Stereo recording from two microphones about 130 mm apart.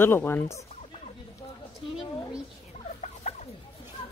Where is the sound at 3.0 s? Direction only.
65° left (ahead or behind).